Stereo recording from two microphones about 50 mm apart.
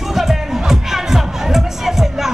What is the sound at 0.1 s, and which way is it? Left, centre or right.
Music, centre.